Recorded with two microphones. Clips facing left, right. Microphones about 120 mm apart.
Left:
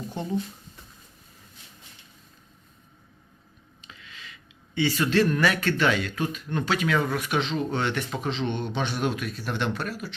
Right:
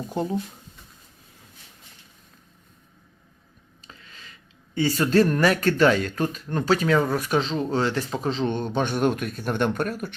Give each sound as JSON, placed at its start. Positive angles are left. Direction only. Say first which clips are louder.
{"t": 3.8, "sound": "speech", "louder": "even", "side_deg": -40}